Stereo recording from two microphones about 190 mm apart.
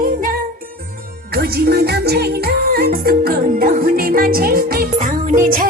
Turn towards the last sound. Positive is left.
turn(degrees=-45)  # may be behind; listen again after turning